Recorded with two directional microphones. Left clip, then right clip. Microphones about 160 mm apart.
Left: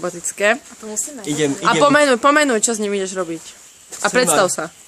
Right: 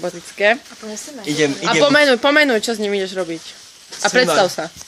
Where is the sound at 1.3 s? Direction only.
15° left (ahead or behind).